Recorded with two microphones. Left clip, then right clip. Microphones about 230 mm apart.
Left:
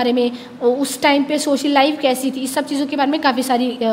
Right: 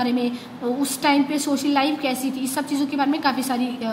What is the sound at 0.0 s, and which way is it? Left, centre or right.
A woman's voice, left.